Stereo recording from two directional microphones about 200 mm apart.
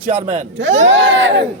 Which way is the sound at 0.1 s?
35° right (ahead or behind).